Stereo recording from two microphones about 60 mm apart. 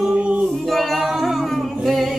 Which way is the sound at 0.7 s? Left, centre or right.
Centre.